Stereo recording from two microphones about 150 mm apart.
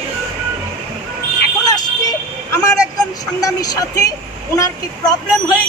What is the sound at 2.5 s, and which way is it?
Speech, 20° left (ahead or behind).